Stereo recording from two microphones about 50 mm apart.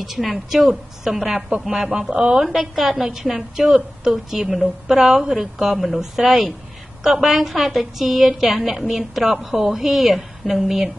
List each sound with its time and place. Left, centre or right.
0.0 s a woman's voice: centre